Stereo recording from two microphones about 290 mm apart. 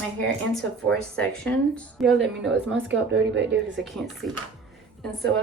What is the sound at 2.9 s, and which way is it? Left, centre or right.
Speech, right.